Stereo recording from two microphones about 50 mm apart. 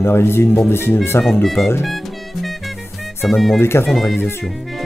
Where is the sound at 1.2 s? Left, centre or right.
Centre.